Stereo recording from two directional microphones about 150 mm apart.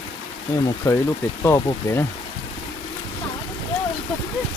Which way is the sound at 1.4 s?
20° left (ahead or behind).